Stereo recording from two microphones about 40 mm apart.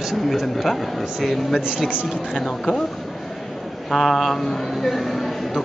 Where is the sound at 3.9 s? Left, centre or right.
Centre.